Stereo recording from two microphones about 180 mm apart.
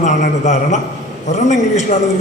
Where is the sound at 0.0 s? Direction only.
40° left (ahead or behind).